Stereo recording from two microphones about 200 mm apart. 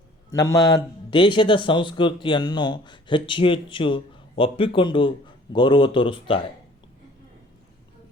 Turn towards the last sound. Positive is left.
turn(degrees=25)  # may be behind; listen again after turning